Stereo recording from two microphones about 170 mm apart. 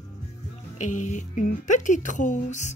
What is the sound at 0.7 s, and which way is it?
Speech, 45° left (ahead or behind).